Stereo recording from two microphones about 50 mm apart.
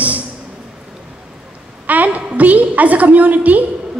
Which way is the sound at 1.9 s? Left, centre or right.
Right.